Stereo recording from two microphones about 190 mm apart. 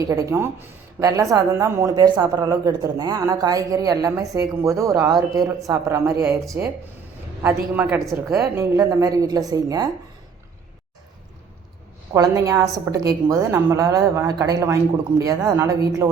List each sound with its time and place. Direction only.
0.0 s a woman's voice: 20° right (ahead or behind)
12.1 s speech: 15° right (ahead or behind)